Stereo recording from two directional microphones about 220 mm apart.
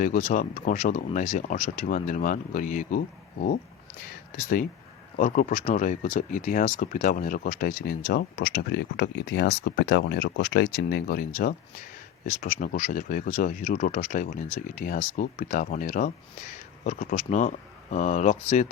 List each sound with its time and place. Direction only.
0.0 s speech: 35° left (ahead or behind)
5.1 s speech: 35° left (ahead or behind)